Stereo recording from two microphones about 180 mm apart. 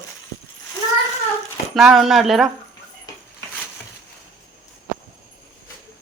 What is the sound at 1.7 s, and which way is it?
Laughter, centre (ahead or behind).